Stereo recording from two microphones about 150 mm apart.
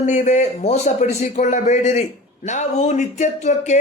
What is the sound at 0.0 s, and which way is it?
Speech, 50° left (ahead or behind).